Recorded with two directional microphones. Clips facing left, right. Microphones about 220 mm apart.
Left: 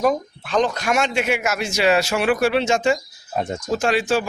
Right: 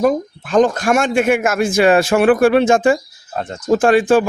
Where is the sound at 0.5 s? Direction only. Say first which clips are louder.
Right 6 dB; 50° right (ahead or behind).